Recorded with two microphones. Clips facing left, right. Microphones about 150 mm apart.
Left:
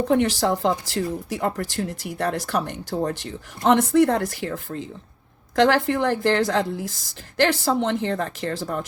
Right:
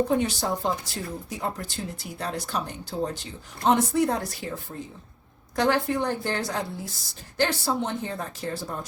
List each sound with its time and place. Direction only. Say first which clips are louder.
0.1 s a woman's voice: left 5 dB; 85° left